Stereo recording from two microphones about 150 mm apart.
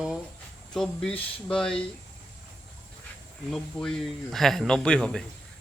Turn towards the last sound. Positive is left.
turn(degrees=5)  # may be behind; listen again after turning